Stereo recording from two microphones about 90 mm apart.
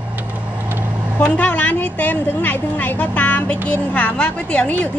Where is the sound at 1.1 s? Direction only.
15° left (ahead or behind).